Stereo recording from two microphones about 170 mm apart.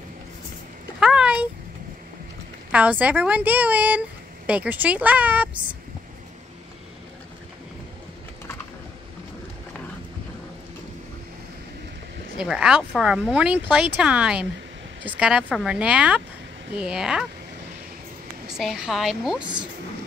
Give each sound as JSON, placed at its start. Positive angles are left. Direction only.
{"t": 0.9, "sound": "a sound", "side_deg": -5}
{"t": 2.7, "sound": "a woman's voice", "side_deg": -10}
{"t": 12.4, "sound": "a woman's voice", "side_deg": -5}
{"t": 18.5, "sound": "speech", "side_deg": 0}
{"t": 19.4, "sound": "speech", "side_deg": -25}